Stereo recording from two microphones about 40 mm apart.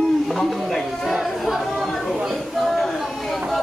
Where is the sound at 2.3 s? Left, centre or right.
Centre.